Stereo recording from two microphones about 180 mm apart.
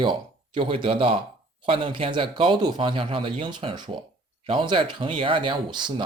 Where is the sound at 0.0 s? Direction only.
25° right (ahead or behind).